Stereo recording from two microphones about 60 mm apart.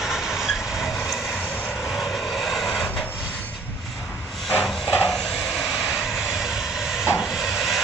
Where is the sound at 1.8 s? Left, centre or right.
Centre.